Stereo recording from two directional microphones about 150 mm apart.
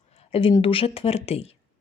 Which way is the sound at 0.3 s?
40° left (ahead or behind).